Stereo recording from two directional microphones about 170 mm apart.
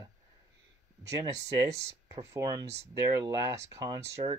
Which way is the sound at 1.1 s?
20° right (ahead or behind).